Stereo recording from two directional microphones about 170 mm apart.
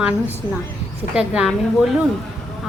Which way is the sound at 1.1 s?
5° right (ahead or behind).